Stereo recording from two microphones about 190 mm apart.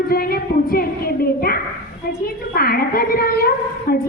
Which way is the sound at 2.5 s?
50° left (ahead or behind).